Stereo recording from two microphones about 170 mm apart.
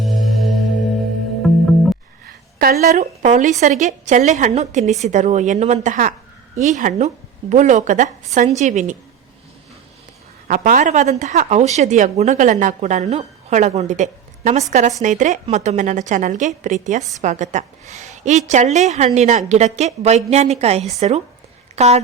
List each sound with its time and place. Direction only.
0.0 s music: centre (ahead or behind)
2.2 s speech: 60° right (ahead or behind)
10.5 s speech: 50° right (ahead or behind)